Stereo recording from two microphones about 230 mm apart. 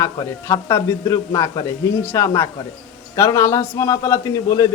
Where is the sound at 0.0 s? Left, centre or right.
Centre.